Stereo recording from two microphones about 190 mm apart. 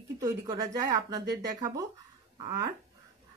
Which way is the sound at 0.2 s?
15° right (ahead or behind).